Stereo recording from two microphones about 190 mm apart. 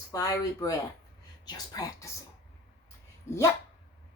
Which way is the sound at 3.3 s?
15° left (ahead or behind).